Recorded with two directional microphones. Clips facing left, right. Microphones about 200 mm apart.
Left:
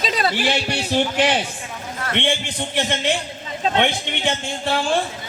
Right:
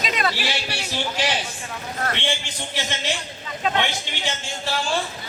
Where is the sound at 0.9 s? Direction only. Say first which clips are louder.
Left 7 dB; 55° left (ahead or behind).